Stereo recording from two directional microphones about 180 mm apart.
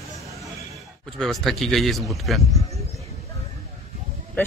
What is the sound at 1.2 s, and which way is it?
Speech, centre (ahead or behind).